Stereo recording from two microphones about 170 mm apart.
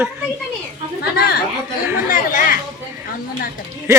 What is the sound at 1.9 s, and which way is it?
Chatter, 55° left (ahead or behind).